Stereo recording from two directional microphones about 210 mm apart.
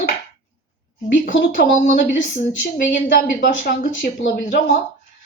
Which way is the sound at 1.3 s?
60° left (ahead or behind).